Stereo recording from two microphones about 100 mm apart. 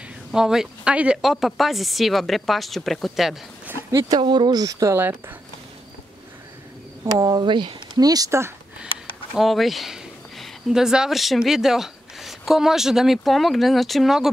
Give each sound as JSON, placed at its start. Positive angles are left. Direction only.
{"t": 0.3, "sound": "speech", "side_deg": -5}
{"t": 4.2, "sound": "speech", "side_deg": -50}
{"t": 7.1, "sound": "speech", "side_deg": -40}
{"t": 9.3, "sound": "speech", "side_deg": 0}